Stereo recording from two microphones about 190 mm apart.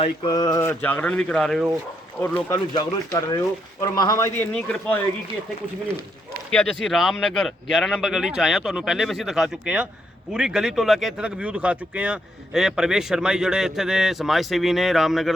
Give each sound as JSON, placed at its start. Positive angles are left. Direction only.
{"t": 0.0, "sound": "speech", "side_deg": 25}
{"t": 6.5, "sound": "speech", "side_deg": 5}